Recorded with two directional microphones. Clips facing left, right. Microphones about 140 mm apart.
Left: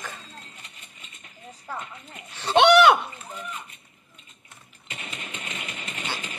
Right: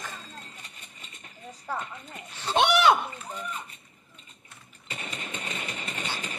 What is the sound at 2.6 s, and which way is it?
Speech, 70° left (ahead or behind).